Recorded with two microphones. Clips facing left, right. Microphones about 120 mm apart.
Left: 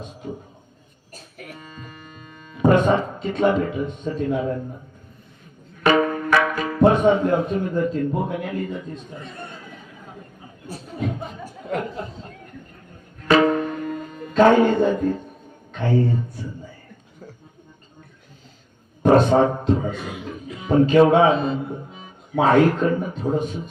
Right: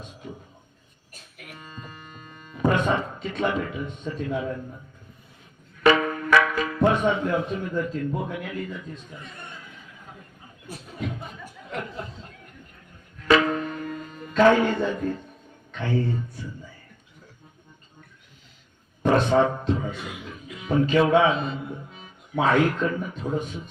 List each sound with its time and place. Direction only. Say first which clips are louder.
1.1 s music: left 6 dB; 35° left (ahead or behind)
2.6 s speech: left 6 dB; 40° left (ahead or behind)
5.8 s music: left 2 dB; 40° left (ahead or behind)
6.9 s a man's voice: left 6 dB; 40° left (ahead or behind)
10.7 s a sound: left 5 dB; 35° left (ahead or behind)
13.2 s music: left 4 dB; 40° left (ahead or behind)
15.7 s a man's voice: left 5 dB; 40° left (ahead or behind)
19.0 s a man's voice: left 5 dB; 45° left (ahead or behind)